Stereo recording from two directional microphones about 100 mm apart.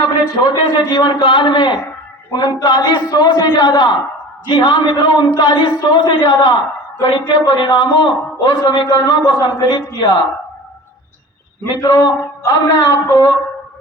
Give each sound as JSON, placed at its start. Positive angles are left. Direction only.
{"t": 0.0, "sound": "a man's voice", "side_deg": 40}
{"t": 11.6, "sound": "speech", "side_deg": 30}